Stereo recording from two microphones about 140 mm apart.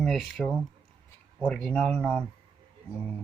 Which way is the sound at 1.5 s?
5° left (ahead or behind).